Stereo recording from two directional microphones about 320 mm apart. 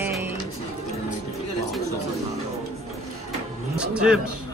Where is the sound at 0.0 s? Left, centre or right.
Centre.